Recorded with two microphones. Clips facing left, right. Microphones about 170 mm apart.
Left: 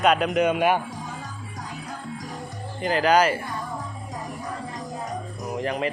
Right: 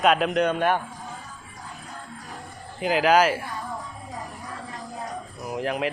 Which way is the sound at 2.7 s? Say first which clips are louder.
Even; 5° right (ahead or behind).